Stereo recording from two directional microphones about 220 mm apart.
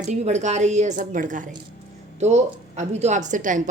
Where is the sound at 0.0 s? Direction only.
30° right (ahead or behind).